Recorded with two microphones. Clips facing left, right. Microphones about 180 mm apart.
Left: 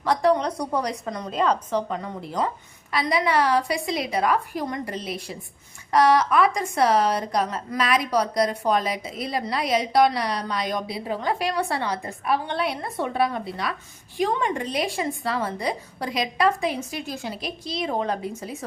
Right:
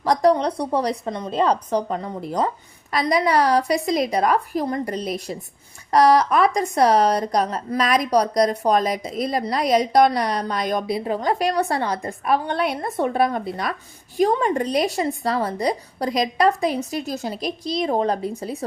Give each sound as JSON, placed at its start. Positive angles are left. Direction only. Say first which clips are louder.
{"t": 0.0, "sound": "a woman's voice", "louder": "right 3 dB", "side_deg": -40}